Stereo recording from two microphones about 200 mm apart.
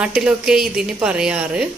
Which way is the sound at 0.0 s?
5° right (ahead or behind).